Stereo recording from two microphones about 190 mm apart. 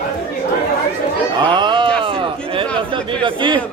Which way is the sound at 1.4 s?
25° right (ahead or behind).